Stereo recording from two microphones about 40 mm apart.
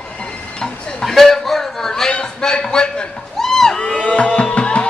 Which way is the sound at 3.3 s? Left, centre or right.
Centre.